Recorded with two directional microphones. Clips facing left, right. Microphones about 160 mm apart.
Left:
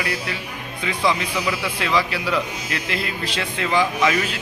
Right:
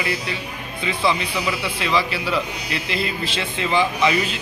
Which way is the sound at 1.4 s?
10° right (ahead or behind).